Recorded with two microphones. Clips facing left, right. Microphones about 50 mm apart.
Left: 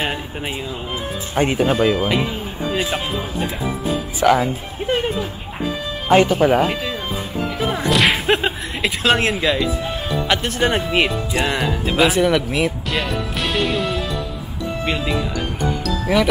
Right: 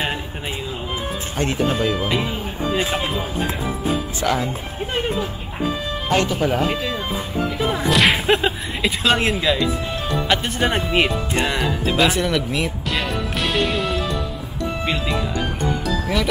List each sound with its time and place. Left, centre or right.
1.3 s speech: centre
2.0 s speech: centre
4.2 s speech: centre
6.0 s speech: centre
6.7 s speech: centre
7.5 s whip: centre
8.4 s speech: centre